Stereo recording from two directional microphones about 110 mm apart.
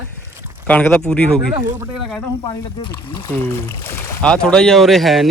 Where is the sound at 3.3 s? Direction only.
20° left (ahead or behind).